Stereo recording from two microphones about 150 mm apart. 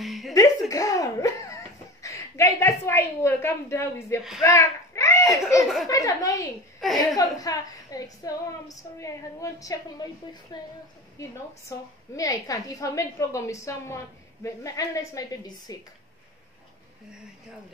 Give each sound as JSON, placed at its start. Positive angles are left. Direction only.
{"t": 0.0, "sound": "a sound", "side_deg": 0}
{"t": 0.3, "sound": "a woman's voice", "side_deg": 20}
{"t": 4.4, "sound": "a sound", "side_deg": 20}
{"t": 5.9, "sound": "a woman's voice", "side_deg": 20}
{"t": 6.8, "sound": "a woman's voice", "side_deg": 0}
{"t": 7.2, "sound": "a woman's voice", "side_deg": 25}
{"t": 11.7, "sound": "a woman's voice", "side_deg": 20}